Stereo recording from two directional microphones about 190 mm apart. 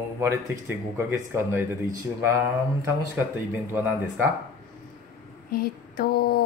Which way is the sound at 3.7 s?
10° right (ahead or behind).